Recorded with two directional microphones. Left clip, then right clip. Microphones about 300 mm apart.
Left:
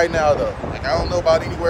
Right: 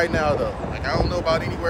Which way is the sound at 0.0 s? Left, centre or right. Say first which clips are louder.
Left 4 dB; centre.